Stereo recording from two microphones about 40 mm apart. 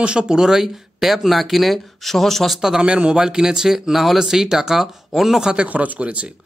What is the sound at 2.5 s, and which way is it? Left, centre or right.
Speech, centre.